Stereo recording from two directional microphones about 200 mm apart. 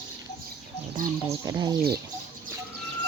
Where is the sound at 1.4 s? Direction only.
20° right (ahead or behind).